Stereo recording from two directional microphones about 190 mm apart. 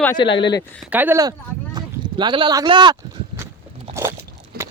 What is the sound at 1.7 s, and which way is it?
Speech, 25° right (ahead or behind).